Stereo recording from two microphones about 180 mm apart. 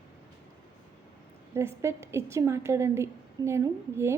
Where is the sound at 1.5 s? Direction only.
15° right (ahead or behind).